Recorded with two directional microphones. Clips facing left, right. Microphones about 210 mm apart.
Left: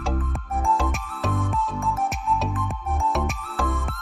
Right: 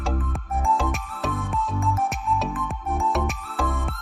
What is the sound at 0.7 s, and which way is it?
Music, centre (ahead or behind).